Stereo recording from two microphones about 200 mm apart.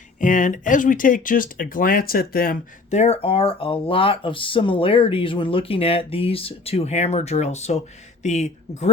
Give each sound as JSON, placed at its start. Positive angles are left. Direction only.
{"t": 0.2, "sound": "speech", "side_deg": 40}